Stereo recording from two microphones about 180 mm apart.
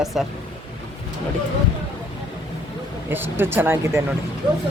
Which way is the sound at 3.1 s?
10° right (ahead or behind).